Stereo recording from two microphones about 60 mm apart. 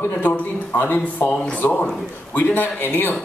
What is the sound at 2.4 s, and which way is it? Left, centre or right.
Speech, left.